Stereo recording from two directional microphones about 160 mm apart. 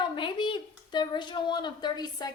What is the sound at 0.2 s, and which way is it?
Speech, 30° left (ahead or behind).